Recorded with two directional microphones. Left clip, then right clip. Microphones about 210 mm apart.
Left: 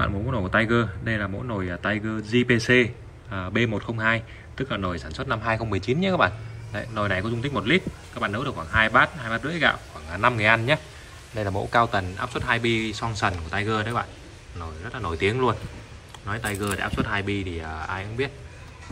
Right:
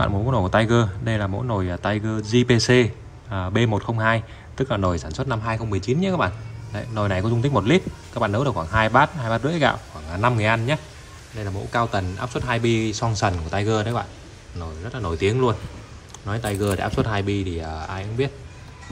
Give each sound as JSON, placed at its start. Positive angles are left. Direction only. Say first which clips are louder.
{"t": 0.0, "sound": "a man's voice", "louder": "right 4 dB", "side_deg": -15}
{"t": 11.3, "sound": "speech", "louder": "left 5 dB", "side_deg": 0}
{"t": 11.7, "sound": "a man's voice", "louder": "left 1 dB", "side_deg": -15}